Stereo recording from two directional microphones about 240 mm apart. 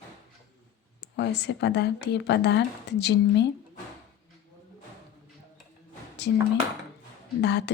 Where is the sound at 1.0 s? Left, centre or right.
Left.